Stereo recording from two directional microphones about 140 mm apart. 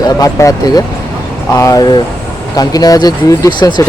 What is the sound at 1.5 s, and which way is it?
Speech, 25° left (ahead or behind).